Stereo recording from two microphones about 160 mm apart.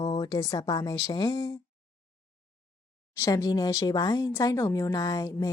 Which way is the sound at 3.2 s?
20° left (ahead or behind).